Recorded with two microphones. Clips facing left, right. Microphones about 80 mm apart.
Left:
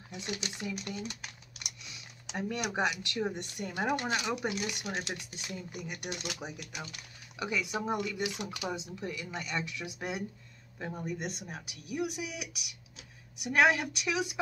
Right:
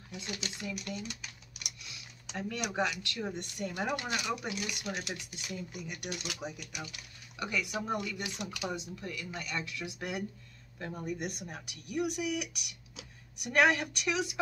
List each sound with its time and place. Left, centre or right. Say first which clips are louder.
0.1 s speech: left 2 dB; centre
0.9 s speech: left 1 dB; left
2.3 s speech: left 1 dB; centre